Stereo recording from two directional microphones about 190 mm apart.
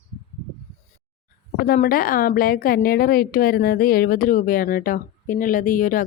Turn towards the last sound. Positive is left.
turn(degrees=45)  # may be behind; listen again after turning